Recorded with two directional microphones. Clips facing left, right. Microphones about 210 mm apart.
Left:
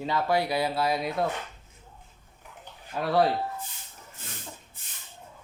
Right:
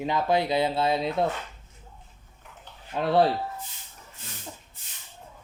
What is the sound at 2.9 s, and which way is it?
Speech, 25° right (ahead or behind).